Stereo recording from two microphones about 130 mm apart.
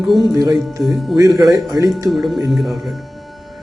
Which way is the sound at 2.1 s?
Centre (ahead or behind).